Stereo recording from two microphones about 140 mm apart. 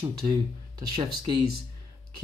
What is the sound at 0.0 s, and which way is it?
Speech, 30° right (ahead or behind).